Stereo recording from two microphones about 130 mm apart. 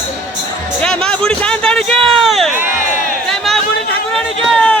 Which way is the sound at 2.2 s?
Centre (ahead or behind).